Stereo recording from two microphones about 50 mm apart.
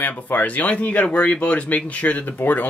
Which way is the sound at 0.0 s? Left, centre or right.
Left.